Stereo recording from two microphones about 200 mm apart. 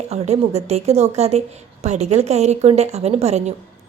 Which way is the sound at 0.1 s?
30° right (ahead or behind).